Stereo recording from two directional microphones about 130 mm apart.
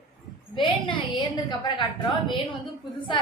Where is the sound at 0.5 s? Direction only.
40° left (ahead or behind).